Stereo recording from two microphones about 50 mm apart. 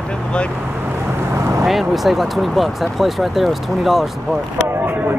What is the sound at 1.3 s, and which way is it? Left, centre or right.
Vehicle, right.